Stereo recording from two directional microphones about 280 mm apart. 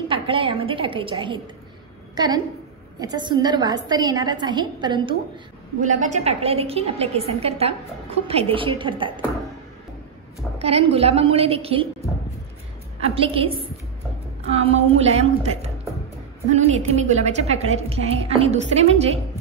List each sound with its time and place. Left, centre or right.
0.1 s a woman's voice: centre
10.6 s a woman's voice: right
13.0 s a woman's voice: centre
14.5 s a woman's voice: right